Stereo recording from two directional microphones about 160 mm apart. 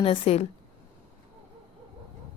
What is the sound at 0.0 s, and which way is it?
Speech, 35° left (ahead or behind).